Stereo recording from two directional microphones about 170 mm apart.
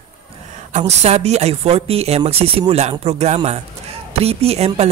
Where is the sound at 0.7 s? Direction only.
40° right (ahead or behind).